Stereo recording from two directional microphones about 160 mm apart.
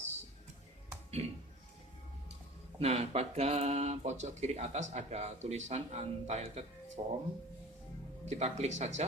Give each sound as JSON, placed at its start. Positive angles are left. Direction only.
{"t": 1.2, "sound": "music", "side_deg": -40}
{"t": 2.7, "sound": "speech", "side_deg": -40}
{"t": 8.2, "sound": "speech", "side_deg": -45}